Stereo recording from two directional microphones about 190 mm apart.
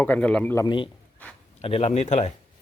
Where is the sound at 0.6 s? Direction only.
25° left (ahead or behind).